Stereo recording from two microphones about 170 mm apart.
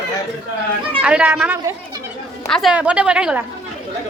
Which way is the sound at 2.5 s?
Centre (ahead or behind).